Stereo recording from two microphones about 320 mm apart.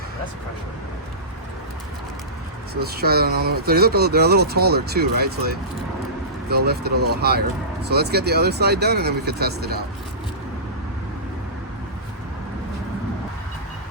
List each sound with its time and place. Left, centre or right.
2.8 s speech: right
6.7 s speech: right